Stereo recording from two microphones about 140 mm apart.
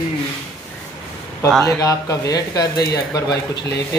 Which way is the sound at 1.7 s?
25° left (ahead or behind).